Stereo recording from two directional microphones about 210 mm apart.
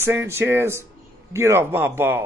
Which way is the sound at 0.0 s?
10° right (ahead or behind).